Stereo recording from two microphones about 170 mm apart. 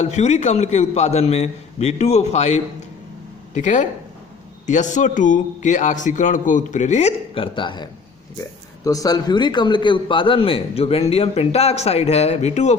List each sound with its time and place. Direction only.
0.0 s a man's voice: 40° left (ahead or behind)